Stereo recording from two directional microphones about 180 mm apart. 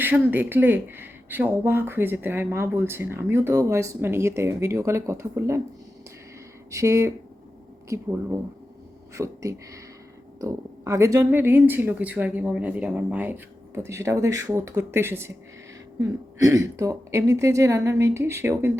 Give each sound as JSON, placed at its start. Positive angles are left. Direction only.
{"t": 0.0, "sound": "speech", "side_deg": -10}
{"t": 6.7, "sound": "speech", "side_deg": -15}